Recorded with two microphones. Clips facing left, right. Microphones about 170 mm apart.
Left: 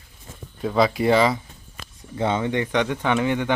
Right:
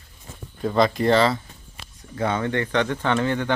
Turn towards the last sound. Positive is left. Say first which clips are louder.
# left 1 dB
turn(degrees=15)  # may be behind; listen again after turning